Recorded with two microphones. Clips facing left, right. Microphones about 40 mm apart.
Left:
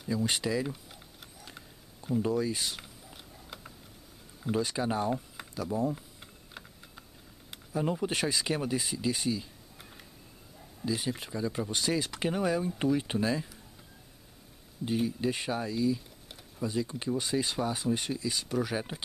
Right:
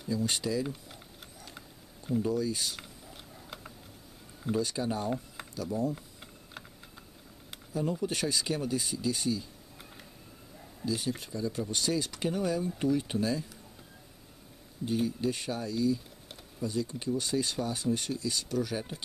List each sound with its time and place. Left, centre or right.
0.1 s speech: centre
0.7 s typing: centre
2.2 s speech: left
2.8 s mechanisms: centre
4.5 s speech: left
6.6 s computer keyboard: centre
7.8 s speech: left
10.9 s speech: centre
14.9 s speech: centre